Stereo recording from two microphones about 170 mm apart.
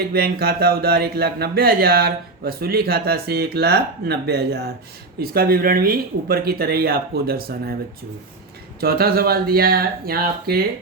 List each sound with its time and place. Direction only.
0.1 s speech: 65° right (ahead or behind)
8.8 s speech: 65° right (ahead or behind)